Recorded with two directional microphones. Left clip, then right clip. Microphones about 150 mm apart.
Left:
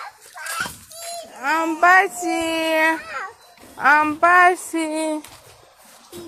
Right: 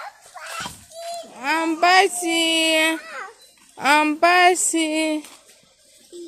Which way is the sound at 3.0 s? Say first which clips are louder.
Left 4 dB; 30° left (ahead or behind).